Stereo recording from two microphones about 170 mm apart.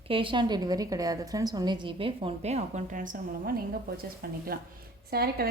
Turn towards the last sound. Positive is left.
turn(degrees=-65)  # may be behind; listen again after turning